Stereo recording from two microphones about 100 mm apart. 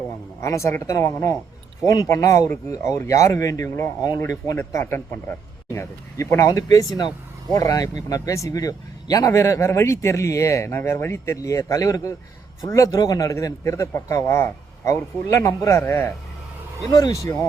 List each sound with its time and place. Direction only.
0.4 s speech: 30° left (ahead or behind)
16.9 s speech: 35° left (ahead or behind)